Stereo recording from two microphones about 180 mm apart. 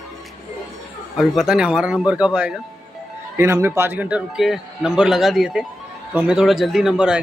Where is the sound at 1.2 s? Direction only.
Centre (ahead or behind).